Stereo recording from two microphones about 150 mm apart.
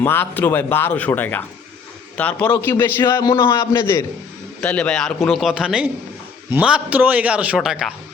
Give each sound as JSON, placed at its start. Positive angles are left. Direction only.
{"t": 0.0, "sound": "a man's voice", "side_deg": 15}
{"t": 4.6, "sound": "a man's voice", "side_deg": 5}